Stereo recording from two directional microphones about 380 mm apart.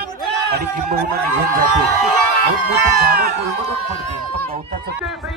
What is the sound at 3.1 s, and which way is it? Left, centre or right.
Speech, right.